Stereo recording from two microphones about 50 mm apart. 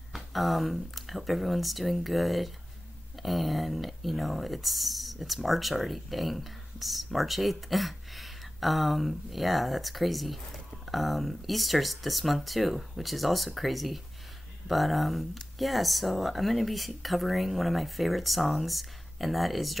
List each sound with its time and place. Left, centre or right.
0.1 s speech: centre